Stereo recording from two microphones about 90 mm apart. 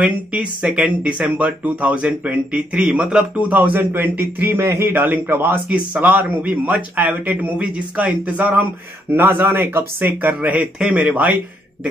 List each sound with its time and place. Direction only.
0.0 s speech: 10° right (ahead or behind)
3.3 s speech: 20° right (ahead or behind)